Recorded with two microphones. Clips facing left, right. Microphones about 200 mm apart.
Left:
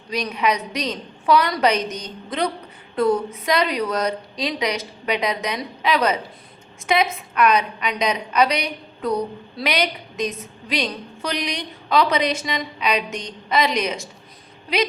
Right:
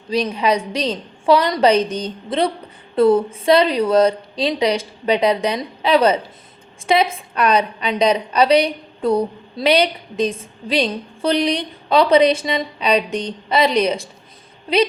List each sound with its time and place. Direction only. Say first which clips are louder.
0.1 s a woman's voice: right 4 dB; 30° right (ahead or behind)